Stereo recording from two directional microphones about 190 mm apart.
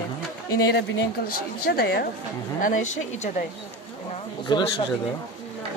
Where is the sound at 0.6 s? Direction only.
60° left (ahead or behind).